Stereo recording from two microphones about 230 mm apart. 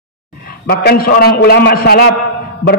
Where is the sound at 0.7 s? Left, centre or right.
Left.